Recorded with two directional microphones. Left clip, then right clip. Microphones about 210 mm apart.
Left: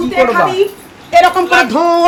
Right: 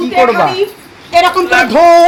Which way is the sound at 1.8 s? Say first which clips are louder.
Right 6 dB; 20° left (ahead or behind).